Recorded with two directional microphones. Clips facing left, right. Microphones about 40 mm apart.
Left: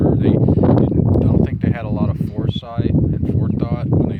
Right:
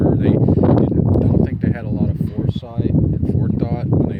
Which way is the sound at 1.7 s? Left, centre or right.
Left.